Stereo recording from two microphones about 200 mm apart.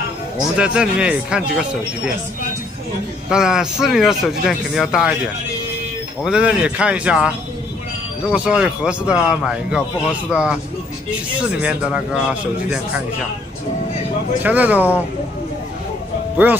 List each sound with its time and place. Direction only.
0.6 s speech: 5° right (ahead or behind)
3.3 s speech: 5° right (ahead or behind)
6.2 s speech: 5° right (ahead or behind)
11.6 s speech: 5° right (ahead or behind)
14.4 s speech: 10° right (ahead or behind)